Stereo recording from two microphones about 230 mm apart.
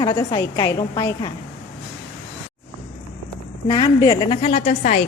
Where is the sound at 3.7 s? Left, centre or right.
Centre.